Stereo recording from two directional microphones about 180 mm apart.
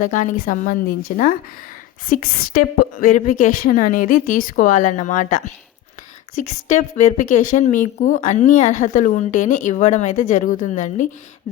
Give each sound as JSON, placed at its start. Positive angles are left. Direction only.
{"t": 0.0, "sound": "a woman's voice", "side_deg": 45}